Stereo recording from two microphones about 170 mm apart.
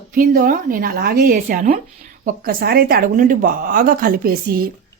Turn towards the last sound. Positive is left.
turn(degrees=-60)  # may be behind; listen again after turning